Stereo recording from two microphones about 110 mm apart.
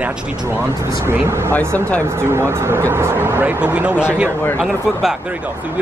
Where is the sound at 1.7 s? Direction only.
15° left (ahead or behind).